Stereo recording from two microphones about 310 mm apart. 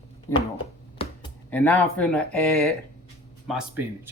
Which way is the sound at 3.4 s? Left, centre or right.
Centre.